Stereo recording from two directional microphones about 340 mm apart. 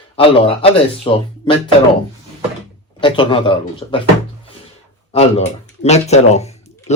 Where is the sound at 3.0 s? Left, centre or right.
Centre.